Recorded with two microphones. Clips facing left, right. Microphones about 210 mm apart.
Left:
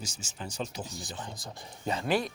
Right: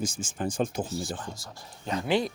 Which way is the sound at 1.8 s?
5° left (ahead or behind).